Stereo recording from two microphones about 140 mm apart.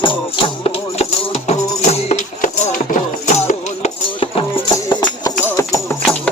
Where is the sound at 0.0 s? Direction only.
35° left (ahead or behind).